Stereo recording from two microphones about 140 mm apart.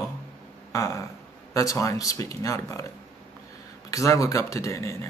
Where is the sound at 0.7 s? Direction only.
25° left (ahead or behind).